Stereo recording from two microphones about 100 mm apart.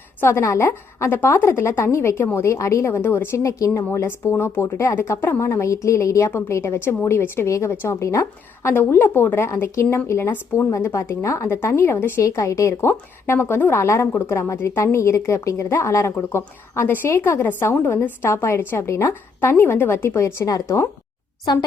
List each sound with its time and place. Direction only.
0.2 s a woman's voice: 25° left (ahead or behind)
21.5 s speech: 45° left (ahead or behind)